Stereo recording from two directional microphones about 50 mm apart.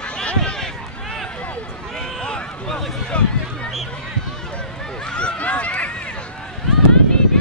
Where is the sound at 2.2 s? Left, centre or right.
Centre.